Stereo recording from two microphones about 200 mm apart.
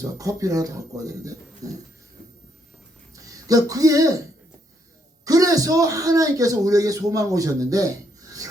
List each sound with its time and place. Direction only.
0.0 s a man's voice: 15° right (ahead or behind)
3.2 s speech: 15° right (ahead or behind)
5.2 s a man's voice: 15° right (ahead or behind)